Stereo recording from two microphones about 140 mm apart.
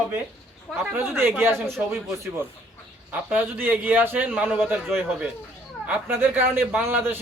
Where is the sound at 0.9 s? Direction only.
15° right (ahead or behind).